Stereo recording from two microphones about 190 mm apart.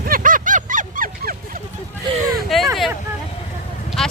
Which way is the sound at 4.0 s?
Centre (ahead or behind).